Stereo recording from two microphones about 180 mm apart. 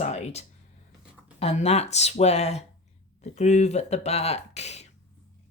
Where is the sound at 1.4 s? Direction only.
35° left (ahead or behind).